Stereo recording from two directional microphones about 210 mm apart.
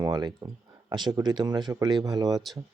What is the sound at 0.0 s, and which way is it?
Speech, 20° right (ahead or behind).